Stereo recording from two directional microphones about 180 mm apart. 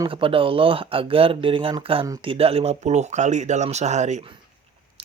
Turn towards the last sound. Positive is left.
turn(degrees=-40)  # may be behind; listen again after turning